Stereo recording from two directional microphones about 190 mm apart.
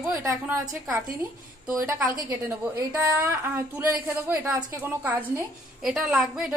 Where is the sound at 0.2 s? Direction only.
15° right (ahead or behind).